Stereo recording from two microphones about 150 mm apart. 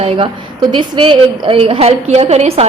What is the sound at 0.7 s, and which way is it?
A woman's voice, 35° right (ahead or behind).